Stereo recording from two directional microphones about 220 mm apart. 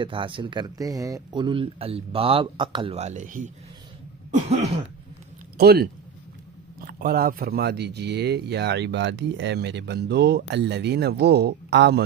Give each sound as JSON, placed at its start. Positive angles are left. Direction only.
{"t": 0.0, "sound": "speech", "side_deg": -25}
{"t": 4.3, "sound": "throat clearing", "side_deg": -30}
{"t": 5.6, "sound": "speech", "side_deg": -45}